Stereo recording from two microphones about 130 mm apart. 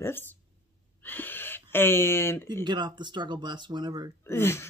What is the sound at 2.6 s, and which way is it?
Speech, 35° right (ahead or behind).